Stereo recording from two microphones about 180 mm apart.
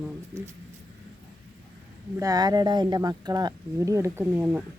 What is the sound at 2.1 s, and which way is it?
Speech, 20° right (ahead or behind).